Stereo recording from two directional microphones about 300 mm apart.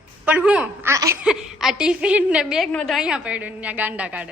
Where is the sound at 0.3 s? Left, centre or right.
Centre.